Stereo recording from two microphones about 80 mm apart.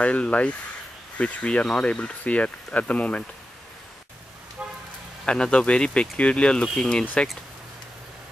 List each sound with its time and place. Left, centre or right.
0.0 s speech: centre
4.6 s vehicle: centre
5.2 s speech: centre